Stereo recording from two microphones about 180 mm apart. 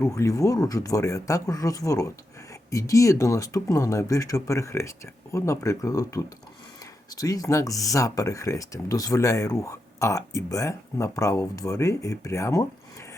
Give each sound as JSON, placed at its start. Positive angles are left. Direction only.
{"t": 0.0, "sound": "speech", "side_deg": 15}